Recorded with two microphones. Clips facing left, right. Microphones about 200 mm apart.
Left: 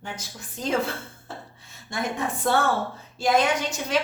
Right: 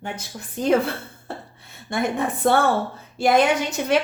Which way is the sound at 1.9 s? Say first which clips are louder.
Right 5 dB; 60° right (ahead or behind).